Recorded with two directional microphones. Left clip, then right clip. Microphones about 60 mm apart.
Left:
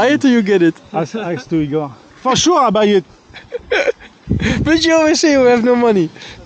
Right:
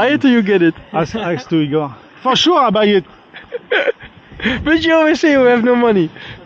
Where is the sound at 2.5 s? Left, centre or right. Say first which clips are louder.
Left 1 dB; left.